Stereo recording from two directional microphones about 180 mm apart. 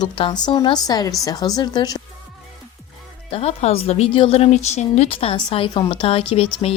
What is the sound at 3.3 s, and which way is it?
Speech, 35° left (ahead or behind).